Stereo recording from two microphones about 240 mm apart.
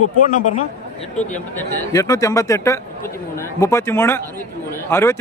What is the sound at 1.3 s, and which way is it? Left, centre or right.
A man's voice, centre.